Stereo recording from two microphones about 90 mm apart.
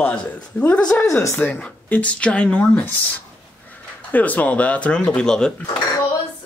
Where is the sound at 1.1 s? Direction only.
25° left (ahead or behind).